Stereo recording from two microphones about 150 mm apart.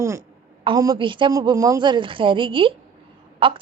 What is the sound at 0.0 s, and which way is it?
Speech, 20° right (ahead or behind).